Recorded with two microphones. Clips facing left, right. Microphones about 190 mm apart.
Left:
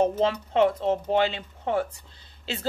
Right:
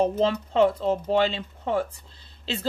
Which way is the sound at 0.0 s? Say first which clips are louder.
Even; 35° right (ahead or behind).